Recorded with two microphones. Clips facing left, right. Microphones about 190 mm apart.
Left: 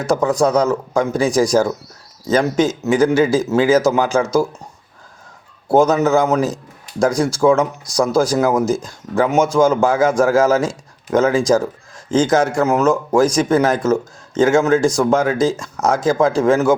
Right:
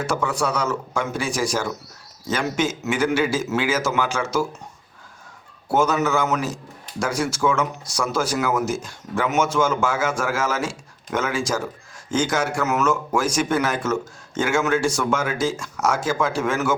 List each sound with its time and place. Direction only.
0.0 s speech: 40° left (ahead or behind)
5.7 s speech: 35° left (ahead or behind)